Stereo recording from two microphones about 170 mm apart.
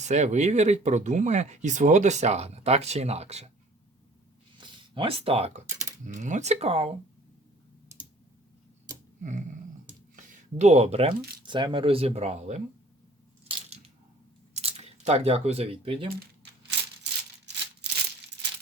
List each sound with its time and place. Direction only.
0.0 s speech: 45° right (ahead or behind)
4.6 s speech: 30° right (ahead or behind)
9.2 s speech: 45° right (ahead or behind)
14.5 s speech: 35° right (ahead or behind)
17.0 s a sound: 90° right